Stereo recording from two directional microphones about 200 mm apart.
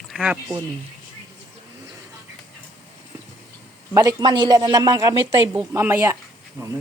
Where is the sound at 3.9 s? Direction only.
20° right (ahead or behind).